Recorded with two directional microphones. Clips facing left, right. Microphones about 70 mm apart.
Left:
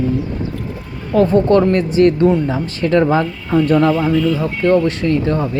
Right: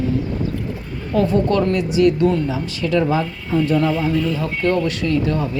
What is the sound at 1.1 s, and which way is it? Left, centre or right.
Speech, left.